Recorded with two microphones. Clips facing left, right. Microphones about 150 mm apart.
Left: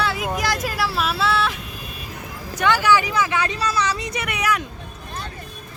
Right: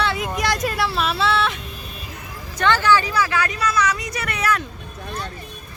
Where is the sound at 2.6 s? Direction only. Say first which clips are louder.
Even; 10° left (ahead or behind); by 4.2 s 30° left (ahead or behind).